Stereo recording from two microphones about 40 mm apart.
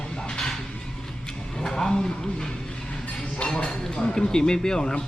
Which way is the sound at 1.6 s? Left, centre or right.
Centre.